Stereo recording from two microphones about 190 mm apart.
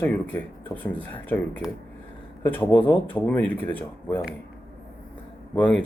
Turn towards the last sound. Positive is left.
turn(degrees=5)  # may be behind; listen again after turning